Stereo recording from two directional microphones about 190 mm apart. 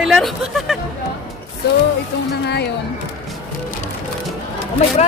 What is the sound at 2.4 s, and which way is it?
Speech, 60° left (ahead or behind).